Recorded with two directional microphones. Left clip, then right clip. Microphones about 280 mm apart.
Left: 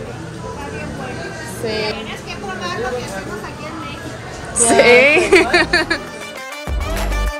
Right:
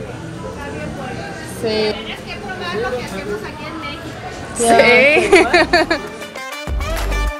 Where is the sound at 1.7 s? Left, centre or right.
Right.